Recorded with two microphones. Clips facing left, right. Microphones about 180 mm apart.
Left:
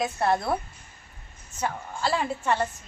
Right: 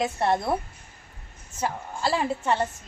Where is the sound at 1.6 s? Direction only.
25° right (ahead or behind).